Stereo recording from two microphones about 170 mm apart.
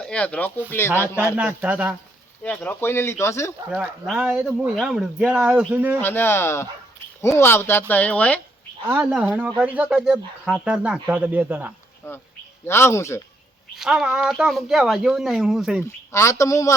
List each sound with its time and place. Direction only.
0.0 s speech: 5° left (ahead or behind)
1.4 s speech: 5° right (ahead or behind)
2.4 s speech: 10° left (ahead or behind)
3.7 s speech: 5° right (ahead or behind)
6.0 s speech: 10° left (ahead or behind)
8.9 s speech: 5° right (ahead or behind)
12.0 s speech: 15° left (ahead or behind)
13.7 s speech: 5° right (ahead or behind)
16.1 s speech: 15° left (ahead or behind)